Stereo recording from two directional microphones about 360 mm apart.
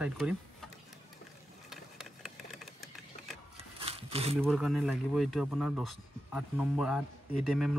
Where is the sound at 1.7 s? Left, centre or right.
Centre.